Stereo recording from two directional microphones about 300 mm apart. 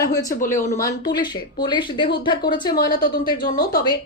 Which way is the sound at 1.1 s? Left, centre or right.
Centre.